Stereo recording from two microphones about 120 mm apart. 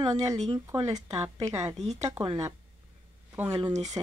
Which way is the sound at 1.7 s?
70° right (ahead or behind).